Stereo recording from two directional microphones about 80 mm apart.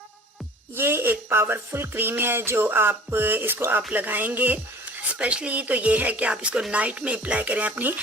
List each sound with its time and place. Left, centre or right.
0.8 s music: right
5.1 s a woman's voice: centre